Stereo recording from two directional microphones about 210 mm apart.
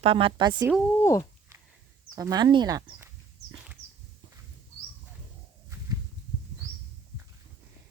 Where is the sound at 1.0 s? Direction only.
15° left (ahead or behind).